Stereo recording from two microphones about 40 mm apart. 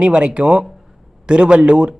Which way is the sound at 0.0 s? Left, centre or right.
Right.